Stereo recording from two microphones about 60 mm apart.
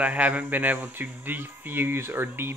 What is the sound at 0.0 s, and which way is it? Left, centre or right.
Speech, right.